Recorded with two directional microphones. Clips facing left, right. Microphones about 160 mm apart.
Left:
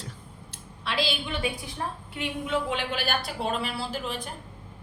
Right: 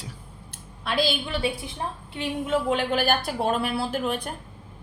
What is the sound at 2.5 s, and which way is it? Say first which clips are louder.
Speech: right 6 dB; 45° right (ahead or behind).